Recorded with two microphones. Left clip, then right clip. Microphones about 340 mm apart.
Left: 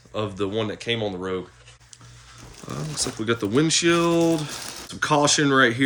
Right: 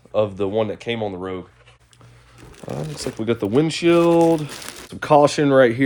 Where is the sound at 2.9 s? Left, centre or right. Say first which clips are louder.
Right 1 dB; centre.